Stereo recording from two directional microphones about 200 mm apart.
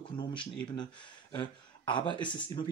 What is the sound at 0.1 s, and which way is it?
Speech, 25° left (ahead or behind).